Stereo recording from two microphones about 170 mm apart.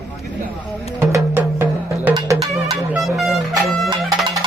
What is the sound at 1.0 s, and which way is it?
Music, 15° right (ahead or behind).